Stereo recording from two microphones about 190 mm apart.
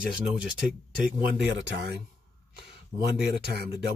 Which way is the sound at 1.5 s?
70° right (ahead or behind).